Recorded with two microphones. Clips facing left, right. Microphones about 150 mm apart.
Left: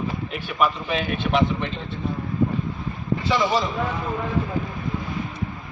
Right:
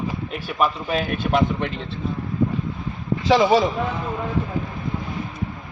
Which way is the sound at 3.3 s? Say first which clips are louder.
Right 6 dB; 90° right.